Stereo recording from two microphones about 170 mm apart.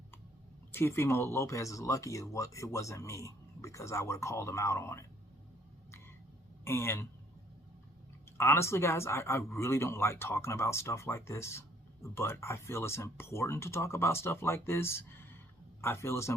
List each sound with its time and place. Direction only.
0.7 s speech: 15° left (ahead or behind)
6.7 s speech: 15° left (ahead or behind)
8.4 s speech: 15° left (ahead or behind)